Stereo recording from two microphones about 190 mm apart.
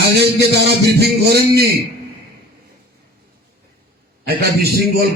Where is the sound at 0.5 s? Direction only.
60° right (ahead or behind).